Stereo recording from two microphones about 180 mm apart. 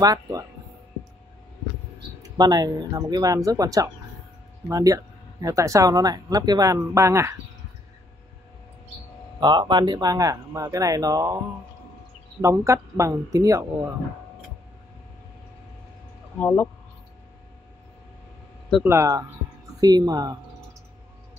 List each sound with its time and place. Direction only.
0.0 s speech: 20° right (ahead or behind)
2.2 s speech: 20° right (ahead or behind)
9.4 s speech: 25° right (ahead or behind)
12.4 s speech: 15° right (ahead or behind)
16.3 s speech: 10° left (ahead or behind)
18.9 s speech: 15° right (ahead or behind)